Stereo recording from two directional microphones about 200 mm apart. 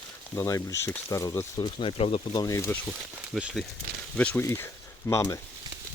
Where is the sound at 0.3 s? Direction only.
15° left (ahead or behind).